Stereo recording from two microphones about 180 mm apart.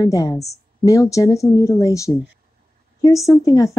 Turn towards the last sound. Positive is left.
turn(degrees=20)  # may be behind; listen again after turning